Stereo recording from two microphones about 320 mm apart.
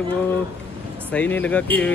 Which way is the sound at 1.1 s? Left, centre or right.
Centre.